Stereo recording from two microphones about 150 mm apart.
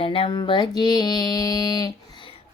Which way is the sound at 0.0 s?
40° left (ahead or behind).